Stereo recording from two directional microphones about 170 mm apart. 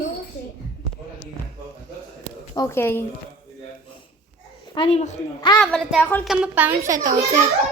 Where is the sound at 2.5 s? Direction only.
15° left (ahead or behind).